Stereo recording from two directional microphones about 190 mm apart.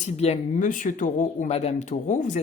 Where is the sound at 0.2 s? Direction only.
35° left (ahead or behind).